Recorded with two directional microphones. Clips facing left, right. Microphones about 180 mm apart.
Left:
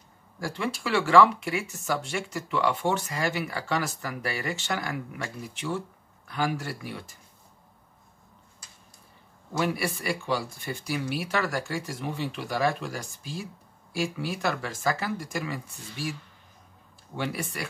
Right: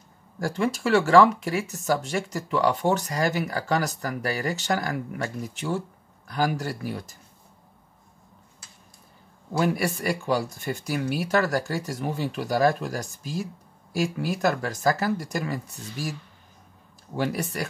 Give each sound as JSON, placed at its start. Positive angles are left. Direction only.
{"t": 0.4, "sound": "speech", "side_deg": -45}
{"t": 9.5, "sound": "speech", "side_deg": -45}
{"t": 17.2, "sound": "speech", "side_deg": -40}